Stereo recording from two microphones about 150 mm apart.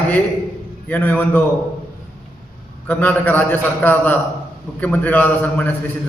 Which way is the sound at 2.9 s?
10° left (ahead or behind).